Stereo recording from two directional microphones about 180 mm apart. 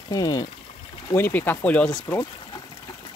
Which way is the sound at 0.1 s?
20° left (ahead or behind).